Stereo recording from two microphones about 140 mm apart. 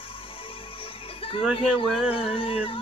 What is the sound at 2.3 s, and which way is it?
Speech, 40° left (ahead or behind).